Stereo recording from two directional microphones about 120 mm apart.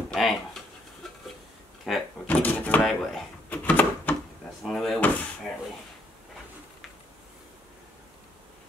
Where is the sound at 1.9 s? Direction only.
Centre (ahead or behind).